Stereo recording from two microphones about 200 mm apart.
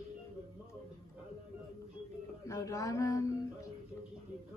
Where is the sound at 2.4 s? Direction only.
15° left (ahead or behind).